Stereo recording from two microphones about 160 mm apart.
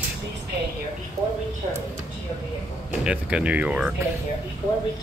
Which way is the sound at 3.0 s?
5° right (ahead or behind).